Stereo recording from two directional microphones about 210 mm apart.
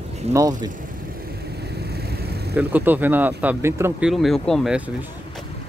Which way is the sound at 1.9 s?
50° right (ahead or behind).